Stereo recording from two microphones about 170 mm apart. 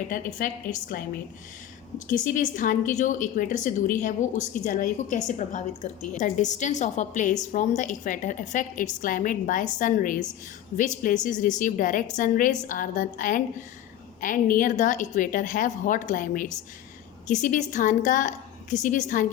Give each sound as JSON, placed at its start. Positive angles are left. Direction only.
{"t": 0.1, "sound": "a woman's voice", "side_deg": 50}
{"t": 2.0, "sound": "a woman's voice", "side_deg": 50}